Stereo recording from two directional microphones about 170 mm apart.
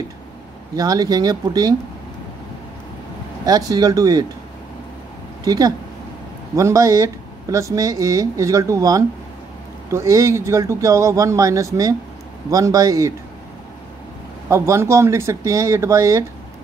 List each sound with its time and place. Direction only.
0.7 s speech: 20° right (ahead or behind)
3.4 s speech: 20° right (ahead or behind)
5.4 s speech: 20° right (ahead or behind)
14.5 s speech: 15° right (ahead or behind)